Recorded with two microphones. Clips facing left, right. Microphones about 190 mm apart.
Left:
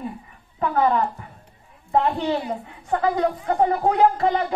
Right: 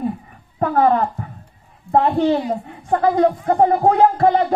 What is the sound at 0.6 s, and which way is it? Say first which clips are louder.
A woman's voice: right 4 dB; 45° right (ahead or behind).